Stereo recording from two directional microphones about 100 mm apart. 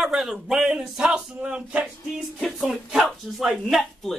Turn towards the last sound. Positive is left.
turn(degrees=0)  # may be behind; listen again after turning